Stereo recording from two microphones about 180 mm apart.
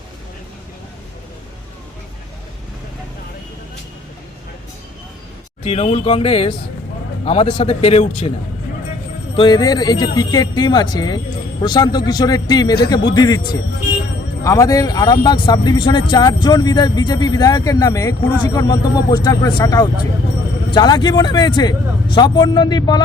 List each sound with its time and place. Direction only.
5.6 s a man's voice: 35° left (ahead or behind)
9.3 s speech: 25° left (ahead or behind)